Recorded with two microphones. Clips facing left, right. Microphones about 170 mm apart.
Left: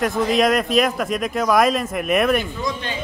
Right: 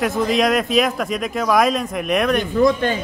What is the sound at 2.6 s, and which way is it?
Speech, 50° right (ahead or behind).